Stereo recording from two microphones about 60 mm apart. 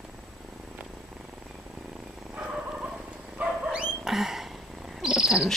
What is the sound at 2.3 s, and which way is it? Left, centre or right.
Dog, centre.